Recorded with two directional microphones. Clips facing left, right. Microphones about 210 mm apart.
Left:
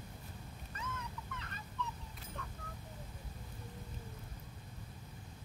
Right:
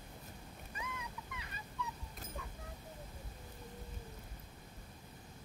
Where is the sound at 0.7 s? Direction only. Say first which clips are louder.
Left 1 dB; 10° right (ahead or behind).